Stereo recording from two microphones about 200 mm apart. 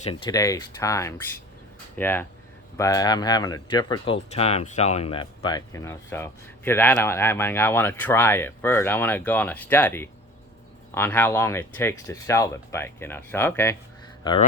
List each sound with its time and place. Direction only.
0.3 s speech: 15° left (ahead or behind)